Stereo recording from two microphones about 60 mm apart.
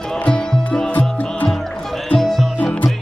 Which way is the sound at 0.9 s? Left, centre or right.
Left.